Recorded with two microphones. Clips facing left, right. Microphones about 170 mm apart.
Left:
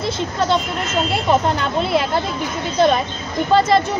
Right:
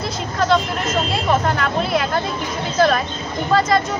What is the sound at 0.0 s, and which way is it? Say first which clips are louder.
Speech: left 1 dB; 30° left (ahead or behind).